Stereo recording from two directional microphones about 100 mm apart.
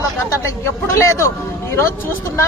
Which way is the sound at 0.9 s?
30° left (ahead or behind).